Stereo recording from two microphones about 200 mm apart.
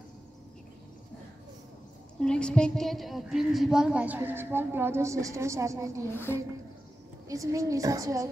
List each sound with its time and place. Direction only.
2.1 s a woman's voice: 5° left (ahead or behind); by 6.0 s 15° right (ahead or behind)
7.2 s a woman's voice: 15° right (ahead or behind)